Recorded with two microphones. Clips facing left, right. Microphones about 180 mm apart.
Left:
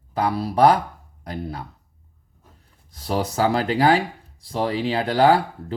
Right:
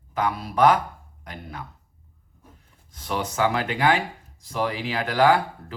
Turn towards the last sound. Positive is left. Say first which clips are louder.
# left 3 dB
turn(degrees=30)  # may be behind; listen again after turning